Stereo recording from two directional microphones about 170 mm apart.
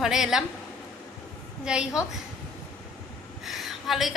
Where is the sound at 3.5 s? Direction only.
Centre (ahead or behind).